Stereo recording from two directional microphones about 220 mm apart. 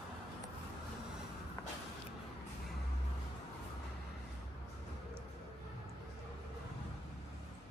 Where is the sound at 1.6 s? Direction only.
15° left (ahead or behind).